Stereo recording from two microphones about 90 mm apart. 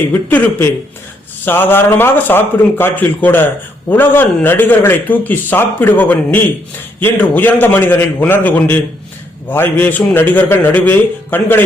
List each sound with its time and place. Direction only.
0.1 s a man's voice: 20° left (ahead or behind)